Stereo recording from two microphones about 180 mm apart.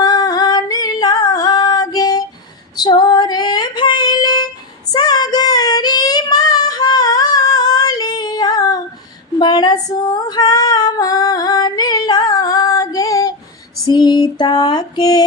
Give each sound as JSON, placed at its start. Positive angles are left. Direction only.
{"t": 0.0, "sound": "singing", "side_deg": 20}
{"t": 2.7, "sound": "female singing", "side_deg": 20}
{"t": 4.9, "sound": "child singing", "side_deg": 20}
{"t": 9.4, "sound": "female singing", "side_deg": 25}
{"t": 13.8, "sound": "a sound", "side_deg": 25}